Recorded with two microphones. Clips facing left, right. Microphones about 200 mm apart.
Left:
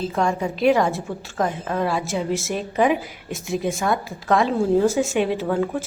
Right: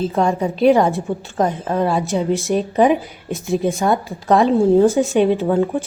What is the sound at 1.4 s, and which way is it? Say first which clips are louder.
Speech: right 4 dB; 30° right (ahead or behind).